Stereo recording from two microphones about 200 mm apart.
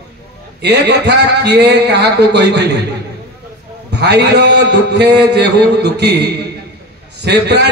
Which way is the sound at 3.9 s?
55° right (ahead or behind).